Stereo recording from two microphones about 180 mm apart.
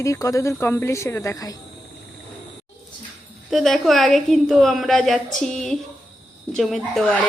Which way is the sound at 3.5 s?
Centre (ahead or behind).